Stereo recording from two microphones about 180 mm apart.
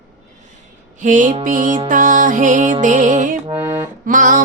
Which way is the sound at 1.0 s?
45° right (ahead or behind).